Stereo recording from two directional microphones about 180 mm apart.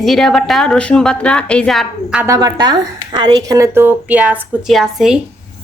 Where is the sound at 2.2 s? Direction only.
20° right (ahead or behind); by 5.1 s centre (ahead or behind).